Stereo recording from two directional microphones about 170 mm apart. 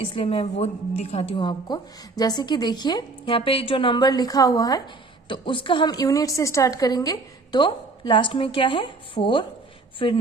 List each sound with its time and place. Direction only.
0.0 s a woman's voice: 30° left (ahead or behind)